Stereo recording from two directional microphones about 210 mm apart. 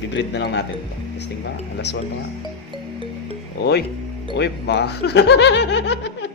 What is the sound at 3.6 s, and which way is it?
Speech, 50° left (ahead or behind).